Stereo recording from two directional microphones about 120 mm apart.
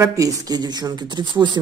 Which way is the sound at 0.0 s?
30° right (ahead or behind).